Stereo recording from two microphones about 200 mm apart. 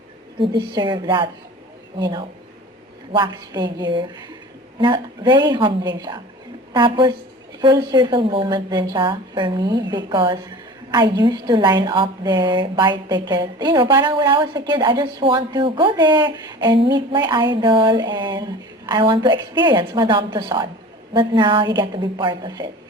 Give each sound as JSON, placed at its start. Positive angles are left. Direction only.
{"t": 0.3, "sound": "a woman's voice", "side_deg": -25}